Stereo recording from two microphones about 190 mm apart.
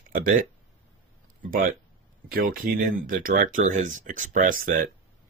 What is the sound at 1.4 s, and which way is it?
Speech, 45° right (ahead or behind).